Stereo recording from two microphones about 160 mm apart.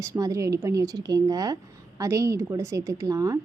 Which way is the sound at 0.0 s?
20° right (ahead or behind).